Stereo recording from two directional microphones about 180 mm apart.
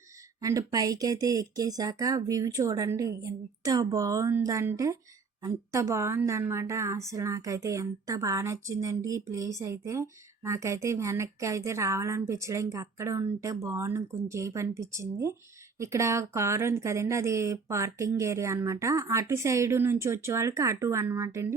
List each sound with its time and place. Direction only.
0.4 s speech: 20° right (ahead or behind)